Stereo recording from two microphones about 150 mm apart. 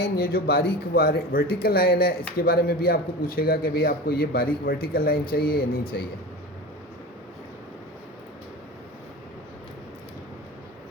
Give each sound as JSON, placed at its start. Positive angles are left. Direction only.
{"t": 0.0, "sound": "a man's voice", "side_deg": 85}